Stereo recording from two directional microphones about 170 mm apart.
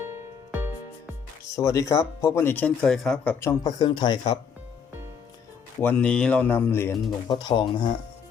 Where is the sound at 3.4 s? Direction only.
20° left (ahead or behind).